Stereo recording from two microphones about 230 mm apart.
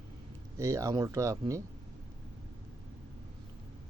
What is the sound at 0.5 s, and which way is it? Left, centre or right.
Speech, centre.